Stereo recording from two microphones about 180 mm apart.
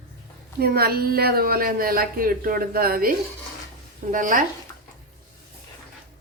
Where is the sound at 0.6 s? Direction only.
60° right (ahead or behind).